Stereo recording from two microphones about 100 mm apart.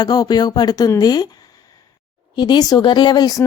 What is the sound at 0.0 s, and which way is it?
Speech, 40° left (ahead or behind).